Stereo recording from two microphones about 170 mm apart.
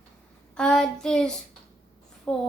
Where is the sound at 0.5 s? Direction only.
5° left (ahead or behind).